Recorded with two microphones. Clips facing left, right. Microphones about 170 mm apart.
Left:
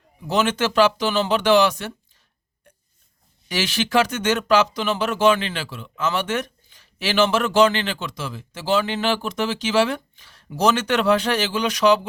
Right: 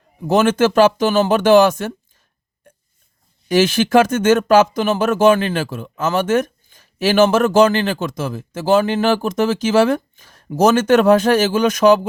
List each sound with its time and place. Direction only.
0.2 s speech: 50° right (ahead or behind)
3.5 s speech: 50° right (ahead or behind)